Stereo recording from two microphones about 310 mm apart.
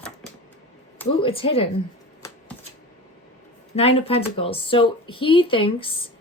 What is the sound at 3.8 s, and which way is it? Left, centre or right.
Speech, centre.